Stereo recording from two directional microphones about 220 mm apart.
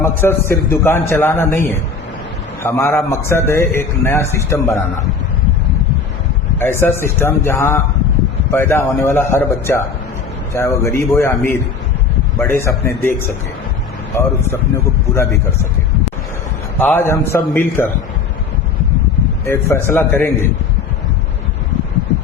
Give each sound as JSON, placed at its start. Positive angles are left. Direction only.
{"t": 0.0, "sound": "a man's voice", "side_deg": 10}
{"t": 6.6, "sound": "a man's voice", "side_deg": 10}
{"t": 15.1, "sound": "a man's voice", "side_deg": 15}
{"t": 16.7, "sound": "a man's voice", "side_deg": 10}
{"t": 19.5, "sound": "a man's voice", "side_deg": 10}